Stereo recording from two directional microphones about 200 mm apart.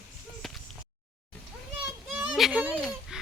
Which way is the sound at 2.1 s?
5° right (ahead or behind).